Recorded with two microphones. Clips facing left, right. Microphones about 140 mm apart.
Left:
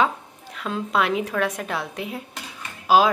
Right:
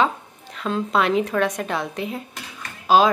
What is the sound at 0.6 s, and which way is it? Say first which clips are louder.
A woman's voice: right 2 dB; 5° left (ahead or behind).